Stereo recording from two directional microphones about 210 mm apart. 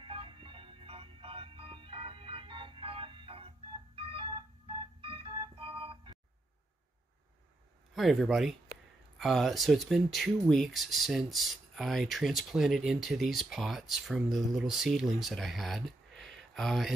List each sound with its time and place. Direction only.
0.0 s organ: 25° right (ahead or behind)
7.9 s speech: centre (ahead or behind)